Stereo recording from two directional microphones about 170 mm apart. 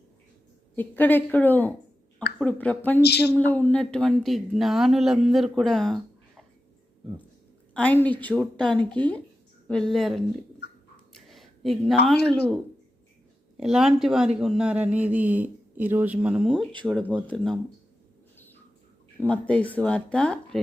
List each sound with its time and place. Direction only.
0.8 s speech: 10° left (ahead or behind)
3.0 s speech: 75° left (ahead or behind)
3.3 s speech: 10° left (ahead or behind)
7.7 s a woman's voice: 10° left (ahead or behind)
11.3 s a sound: centre (ahead or behind)
13.6 s speech: 5° right (ahead or behind)
19.3 s speech: 10° left (ahead or behind)